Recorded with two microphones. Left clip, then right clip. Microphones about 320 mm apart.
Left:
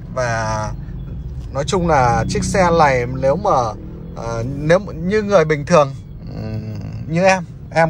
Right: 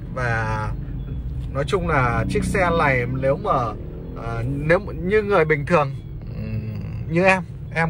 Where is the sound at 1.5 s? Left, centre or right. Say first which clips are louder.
Left 5 dB; centre.